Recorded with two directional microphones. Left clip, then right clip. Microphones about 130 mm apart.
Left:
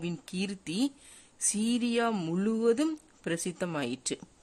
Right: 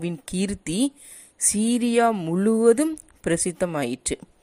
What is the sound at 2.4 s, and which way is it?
A woman's voice, 35° right (ahead or behind).